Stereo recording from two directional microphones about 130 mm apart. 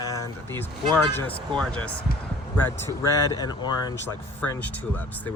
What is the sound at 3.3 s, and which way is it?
Speech, 35° left (ahead or behind).